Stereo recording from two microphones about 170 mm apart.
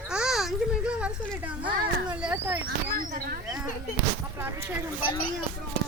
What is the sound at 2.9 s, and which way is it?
Speech, 55° right (ahead or behind).